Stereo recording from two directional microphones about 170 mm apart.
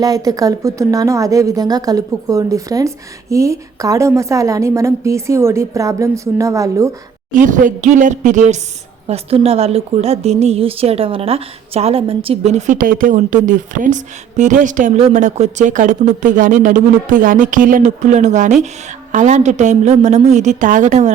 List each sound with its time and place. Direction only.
0.0 s speech: 20° right (ahead or behind)
7.3 s a woman's voice: 50° right (ahead or behind)